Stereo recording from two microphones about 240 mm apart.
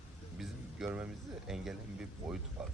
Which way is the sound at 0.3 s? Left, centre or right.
Centre.